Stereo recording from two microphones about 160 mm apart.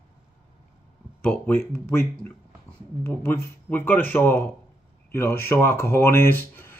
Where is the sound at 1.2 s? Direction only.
10° left (ahead or behind).